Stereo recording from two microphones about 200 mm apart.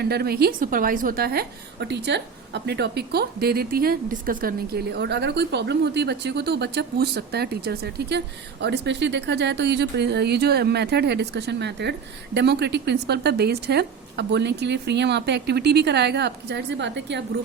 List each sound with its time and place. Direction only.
0.0 s a woman's voice: 50° right (ahead or behind)